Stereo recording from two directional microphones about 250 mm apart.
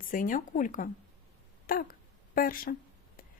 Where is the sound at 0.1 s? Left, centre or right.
Left.